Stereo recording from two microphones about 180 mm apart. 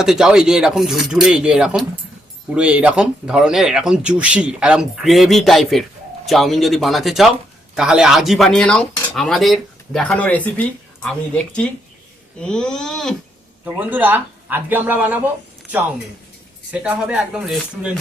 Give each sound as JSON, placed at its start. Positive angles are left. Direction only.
{"t": 0.0, "sound": "speech", "side_deg": -5}
{"t": 13.7, "sound": "speech", "side_deg": -10}
{"t": 16.7, "sound": "speech", "side_deg": -5}